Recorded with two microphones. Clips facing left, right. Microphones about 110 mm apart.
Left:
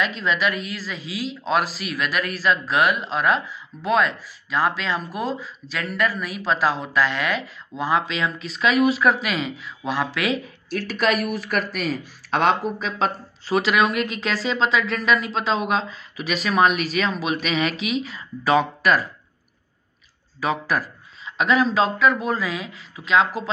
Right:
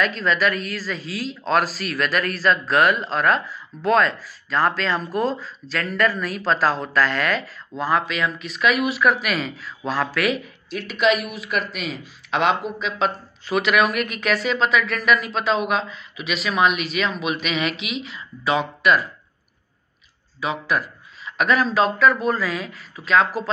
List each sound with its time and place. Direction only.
0.0 s speech: 15° left (ahead or behind)
8.4 s speech: 30° left (ahead or behind)
10.7 s speech: 40° left (ahead or behind)
20.3 s speech: 40° left (ahead or behind)
21.3 s speech: 25° left (ahead or behind)